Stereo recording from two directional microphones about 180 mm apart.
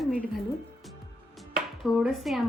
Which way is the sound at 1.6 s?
Centre (ahead or behind).